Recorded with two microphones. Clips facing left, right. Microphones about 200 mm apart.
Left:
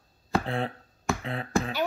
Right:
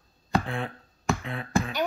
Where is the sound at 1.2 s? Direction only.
40° left (ahead or behind).